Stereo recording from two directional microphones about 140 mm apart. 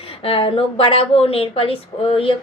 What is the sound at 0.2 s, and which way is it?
Speech, 40° left (ahead or behind).